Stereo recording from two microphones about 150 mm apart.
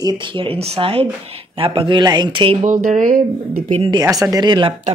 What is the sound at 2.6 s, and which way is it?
Speech, 60° right (ahead or behind).